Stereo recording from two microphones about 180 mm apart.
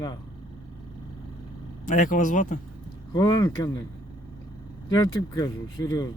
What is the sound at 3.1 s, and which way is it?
Speech, 20° left (ahead or behind).